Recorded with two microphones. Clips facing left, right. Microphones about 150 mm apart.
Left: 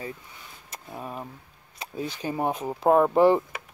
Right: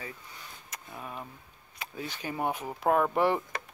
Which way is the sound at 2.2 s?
30° left (ahead or behind).